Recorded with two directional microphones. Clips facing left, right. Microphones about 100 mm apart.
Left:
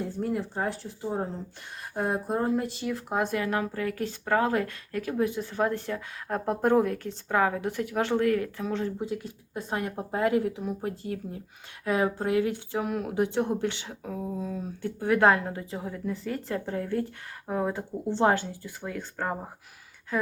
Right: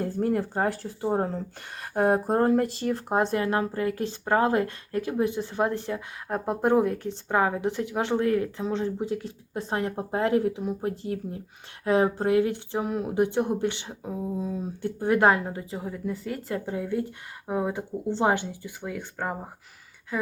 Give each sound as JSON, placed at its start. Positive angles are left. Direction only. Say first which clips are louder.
{"t": 0.0, "sound": "speech", "louder": "right 4 dB", "side_deg": -55}
{"t": 0.8, "sound": "speech", "louder": "right 5 dB", "side_deg": -50}
{"t": 2.8, "sound": "a woman's voice", "louder": "right 4 dB", "side_deg": -40}